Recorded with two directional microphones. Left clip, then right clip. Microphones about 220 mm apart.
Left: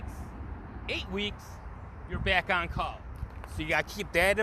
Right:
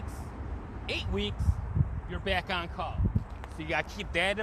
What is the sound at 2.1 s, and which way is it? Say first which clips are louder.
Speech: left 4 dB; 10° left (ahead or behind).